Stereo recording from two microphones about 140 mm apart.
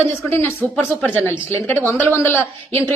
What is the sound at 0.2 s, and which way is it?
Speech, 15° left (ahead or behind).